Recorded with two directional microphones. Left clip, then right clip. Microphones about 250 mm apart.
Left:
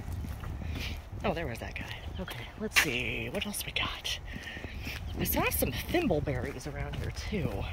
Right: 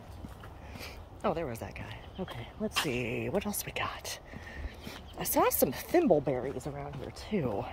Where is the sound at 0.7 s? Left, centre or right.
Centre.